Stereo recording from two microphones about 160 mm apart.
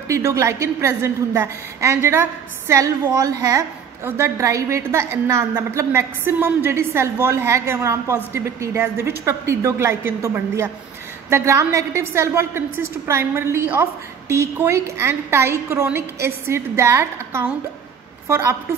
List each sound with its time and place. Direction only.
0.1 s a woman's voice: 20° right (ahead or behind)